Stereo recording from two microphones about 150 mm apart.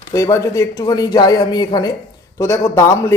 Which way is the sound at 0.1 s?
20° left (ahead or behind).